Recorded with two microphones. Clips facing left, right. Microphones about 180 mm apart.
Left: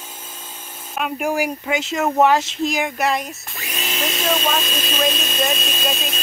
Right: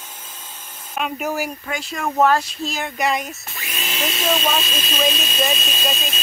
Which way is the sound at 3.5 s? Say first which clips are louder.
Left 4 dB; 40° left (ahead or behind).